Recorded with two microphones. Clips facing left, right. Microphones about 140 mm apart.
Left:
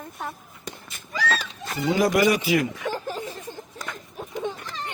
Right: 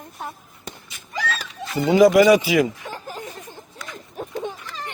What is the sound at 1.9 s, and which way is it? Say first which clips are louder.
Speech: right 7 dB; 90° right.